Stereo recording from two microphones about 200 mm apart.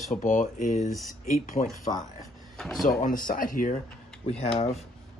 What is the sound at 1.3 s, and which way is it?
Speech, 45° left (ahead or behind).